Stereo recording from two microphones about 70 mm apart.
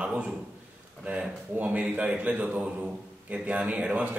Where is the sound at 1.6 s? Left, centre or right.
Right.